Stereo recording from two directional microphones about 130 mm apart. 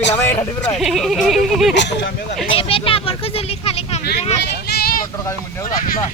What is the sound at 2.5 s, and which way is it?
Speech, 45° left (ahead or behind).